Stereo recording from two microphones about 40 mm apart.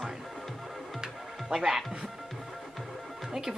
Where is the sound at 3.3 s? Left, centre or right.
Centre.